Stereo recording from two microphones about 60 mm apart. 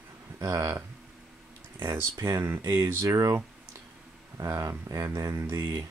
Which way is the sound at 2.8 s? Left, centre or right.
Right.